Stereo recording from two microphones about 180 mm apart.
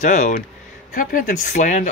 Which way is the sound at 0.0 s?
40° left (ahead or behind).